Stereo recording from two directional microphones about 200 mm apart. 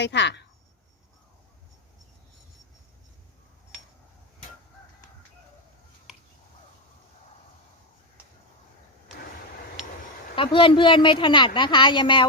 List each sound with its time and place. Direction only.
0.0 s speech: 60° left (ahead or behind)
10.3 s a woman's voice: 25° left (ahead or behind)